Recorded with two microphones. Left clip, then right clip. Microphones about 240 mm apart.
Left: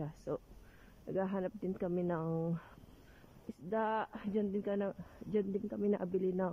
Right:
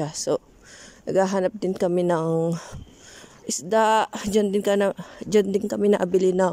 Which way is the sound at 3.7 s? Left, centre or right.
Right.